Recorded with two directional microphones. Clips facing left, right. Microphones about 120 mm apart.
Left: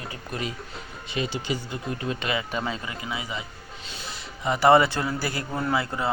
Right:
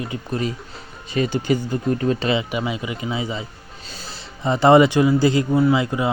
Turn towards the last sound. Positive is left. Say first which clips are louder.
# right 8 dB
turn(degrees=-15)  # may be behind; listen again after turning